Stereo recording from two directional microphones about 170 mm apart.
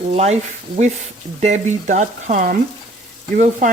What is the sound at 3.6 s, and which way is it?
Stir, 45° right (ahead or behind).